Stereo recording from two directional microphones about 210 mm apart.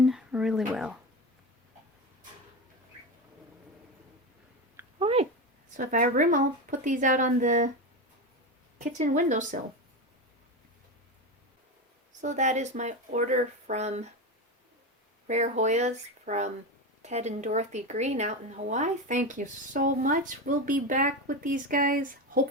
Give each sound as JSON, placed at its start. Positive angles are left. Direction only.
{"t": 0.0, "sound": "a sound", "side_deg": 0}
{"t": 0.7, "sound": "speech", "side_deg": -5}
{"t": 4.9, "sound": "a sound", "side_deg": -25}
{"t": 5.7, "sound": "speech", "side_deg": -40}
{"t": 8.8, "sound": "speech", "side_deg": -35}
{"t": 12.2, "sound": "speech", "side_deg": -35}
{"t": 15.3, "sound": "speech", "side_deg": -35}